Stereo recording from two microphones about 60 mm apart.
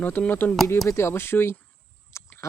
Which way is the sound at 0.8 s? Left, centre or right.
Left.